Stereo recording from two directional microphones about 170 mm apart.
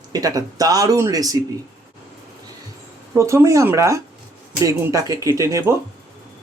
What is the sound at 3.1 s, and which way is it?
Speech, 15° right (ahead or behind).